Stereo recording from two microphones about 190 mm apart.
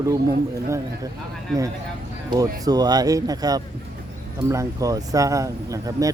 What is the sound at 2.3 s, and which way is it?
Speech, 20° right (ahead or behind).